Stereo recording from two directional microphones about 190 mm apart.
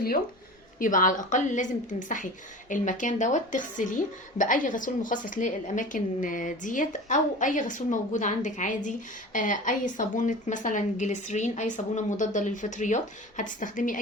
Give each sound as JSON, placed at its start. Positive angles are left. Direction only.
{"t": 0.8, "sound": "a woman's voice", "side_deg": 45}